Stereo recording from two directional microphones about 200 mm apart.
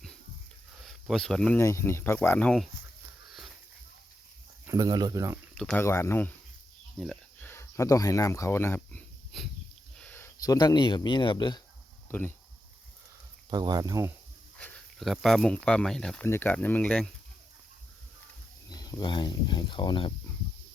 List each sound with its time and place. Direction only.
0.9 s speech: centre (ahead or behind)
3.2 s sniff: centre (ahead or behind)
4.6 s speech: 15° right (ahead or behind)
5.5 s speech: 5° left (ahead or behind)
10.0 s a sound: 5° left (ahead or behind)
10.4 s speech: 20° left (ahead or behind)
12.0 s speech: 10° left (ahead or behind)
13.5 s speech: 20° right (ahead or behind)
14.6 s speech: 5° left (ahead or behind)
18.7 s speech: 20° left (ahead or behind)